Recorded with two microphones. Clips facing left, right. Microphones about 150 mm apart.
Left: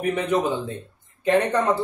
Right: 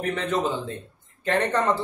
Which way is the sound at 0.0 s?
15° left (ahead or behind).